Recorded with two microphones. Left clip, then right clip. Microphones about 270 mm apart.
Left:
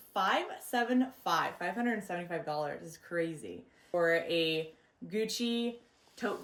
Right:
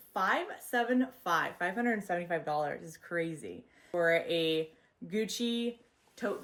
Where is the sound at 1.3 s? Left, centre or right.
Centre.